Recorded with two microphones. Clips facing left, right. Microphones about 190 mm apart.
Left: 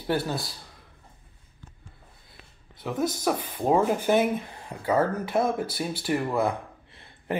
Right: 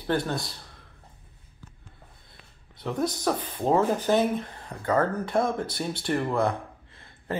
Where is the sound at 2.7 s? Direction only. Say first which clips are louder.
Even; 5° left (ahead or behind).